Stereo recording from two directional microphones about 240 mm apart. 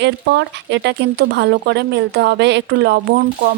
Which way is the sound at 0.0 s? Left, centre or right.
Right.